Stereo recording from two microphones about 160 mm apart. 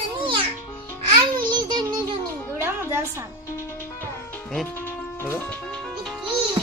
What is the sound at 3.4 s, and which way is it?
Music, 15° left (ahead or behind).